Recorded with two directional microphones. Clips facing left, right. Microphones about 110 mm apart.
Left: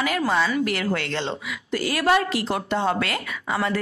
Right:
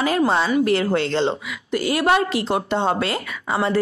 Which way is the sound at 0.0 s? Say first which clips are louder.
Right 3 dB; 30° right (ahead or behind).